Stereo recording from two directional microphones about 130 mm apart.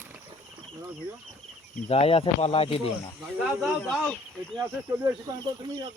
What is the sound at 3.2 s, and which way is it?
Speech, 5° right (ahead or behind).